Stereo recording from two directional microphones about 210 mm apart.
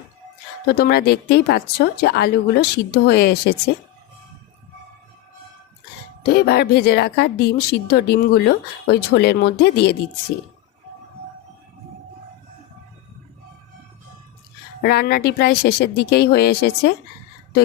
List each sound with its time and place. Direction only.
0.8 s speech: 50° left (ahead or behind)
6.2 s speech: 50° left (ahead or behind)
14.8 s speech: 50° left (ahead or behind)